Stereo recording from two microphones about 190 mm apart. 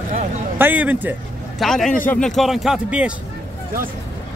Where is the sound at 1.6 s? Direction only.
Centre (ahead or behind).